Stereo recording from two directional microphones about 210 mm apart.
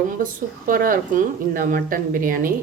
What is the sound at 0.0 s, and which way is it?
Speech, 40° right (ahead or behind).